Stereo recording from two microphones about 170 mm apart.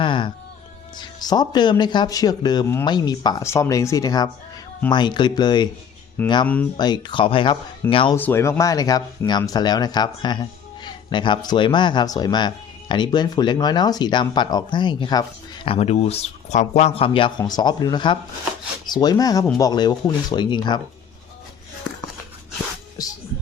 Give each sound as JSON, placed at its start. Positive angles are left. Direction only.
{"t": 0.0, "sound": "speech", "side_deg": 30}
{"t": 8.1, "sound": "speech", "side_deg": 15}